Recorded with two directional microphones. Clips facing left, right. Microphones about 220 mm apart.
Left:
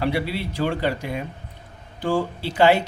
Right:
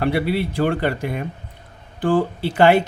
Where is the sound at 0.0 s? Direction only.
55° right (ahead or behind).